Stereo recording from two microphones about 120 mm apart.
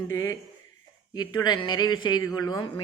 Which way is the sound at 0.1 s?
25° left (ahead or behind).